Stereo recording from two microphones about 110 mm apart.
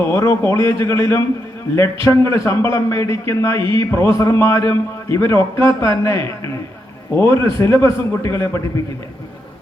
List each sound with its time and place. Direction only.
0.0 s a man's voice: 25° left (ahead or behind)